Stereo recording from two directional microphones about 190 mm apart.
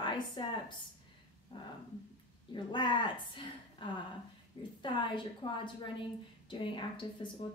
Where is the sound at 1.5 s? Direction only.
25° left (ahead or behind).